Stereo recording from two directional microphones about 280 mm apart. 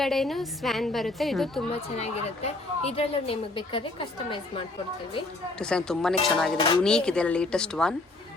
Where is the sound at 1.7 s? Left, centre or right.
Left.